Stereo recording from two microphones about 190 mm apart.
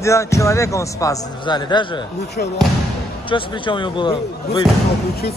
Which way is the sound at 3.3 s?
25° left (ahead or behind).